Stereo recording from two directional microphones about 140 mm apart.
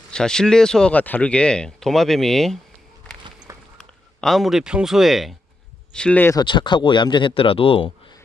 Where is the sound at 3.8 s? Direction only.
Centre (ahead or behind).